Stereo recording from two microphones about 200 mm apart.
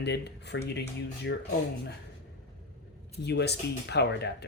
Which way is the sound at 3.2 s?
55° left (ahead or behind).